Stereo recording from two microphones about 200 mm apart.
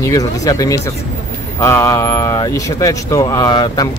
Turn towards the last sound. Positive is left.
turn(degrees=20)  # may be behind; listen again after turning